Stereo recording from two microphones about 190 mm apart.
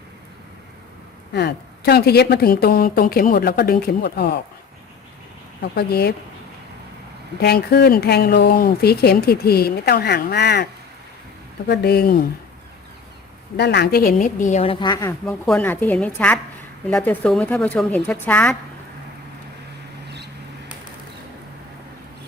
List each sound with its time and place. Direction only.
1.3 s speech: 60° left (ahead or behind)
5.7 s speech: 60° left (ahead or behind)
7.3 s speech: 55° left (ahead or behind)
11.7 s speech: 55° left (ahead or behind)
13.6 s a woman's voice: 60° left (ahead or behind); by 15.1 s 20° left (ahead or behind)
15.3 s speech: 5° left (ahead or behind)